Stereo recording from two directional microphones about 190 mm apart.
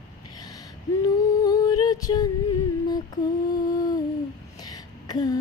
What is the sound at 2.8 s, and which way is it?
Music, 20° left (ahead or behind).